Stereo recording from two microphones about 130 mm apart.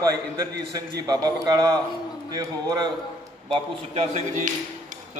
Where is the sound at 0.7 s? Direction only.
30° right (ahead or behind).